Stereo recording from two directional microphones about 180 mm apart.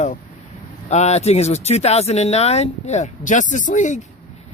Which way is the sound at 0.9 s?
40° left (ahead or behind).